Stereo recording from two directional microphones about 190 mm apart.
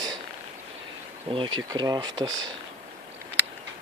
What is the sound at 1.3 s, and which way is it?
Speech, 30° right (ahead or behind).